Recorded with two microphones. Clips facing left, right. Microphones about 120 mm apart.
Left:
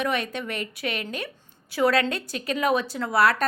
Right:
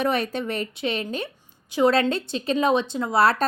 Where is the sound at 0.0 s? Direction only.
35° right (ahead or behind).